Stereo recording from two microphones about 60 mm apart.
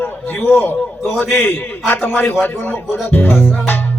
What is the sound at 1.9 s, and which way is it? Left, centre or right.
Music, left.